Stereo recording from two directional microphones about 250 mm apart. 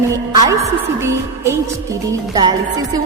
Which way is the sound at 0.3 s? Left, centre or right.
Centre.